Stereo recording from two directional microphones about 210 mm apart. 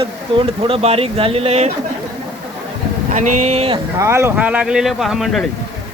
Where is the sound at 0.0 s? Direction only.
25° right (ahead or behind).